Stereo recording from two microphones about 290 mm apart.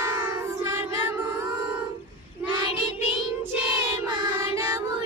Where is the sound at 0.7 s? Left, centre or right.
Centre.